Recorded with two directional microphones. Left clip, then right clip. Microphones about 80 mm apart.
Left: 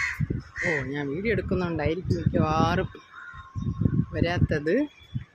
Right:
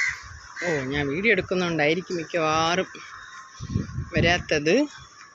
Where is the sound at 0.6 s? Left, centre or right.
Right.